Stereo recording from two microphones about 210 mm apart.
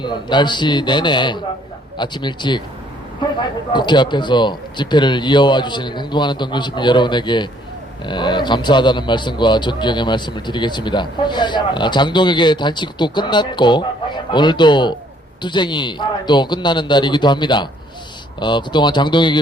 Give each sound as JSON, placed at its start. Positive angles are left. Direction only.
{"t": 0.0, "sound": "a man's voice", "side_deg": 20}
{"t": 3.7, "sound": "a man's voice", "side_deg": 20}